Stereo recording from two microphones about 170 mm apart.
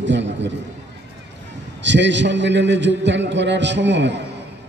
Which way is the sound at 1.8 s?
90° right.